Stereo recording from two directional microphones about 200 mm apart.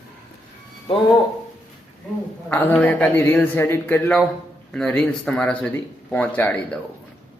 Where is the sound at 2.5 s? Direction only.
10° left (ahead or behind).